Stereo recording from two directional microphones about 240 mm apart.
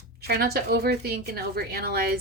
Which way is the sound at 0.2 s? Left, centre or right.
Right.